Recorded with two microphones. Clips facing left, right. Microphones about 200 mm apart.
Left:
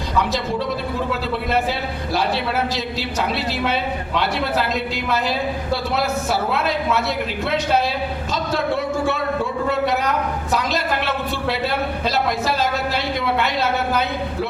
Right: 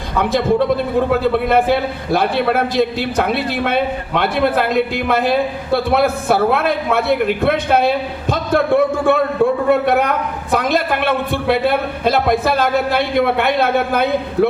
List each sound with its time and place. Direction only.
0.2 s a man's voice: 55° right (ahead or behind)